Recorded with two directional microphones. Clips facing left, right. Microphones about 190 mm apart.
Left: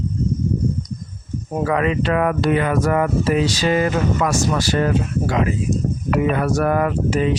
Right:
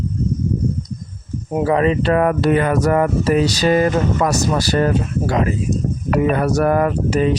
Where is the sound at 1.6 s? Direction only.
30° right (ahead or behind).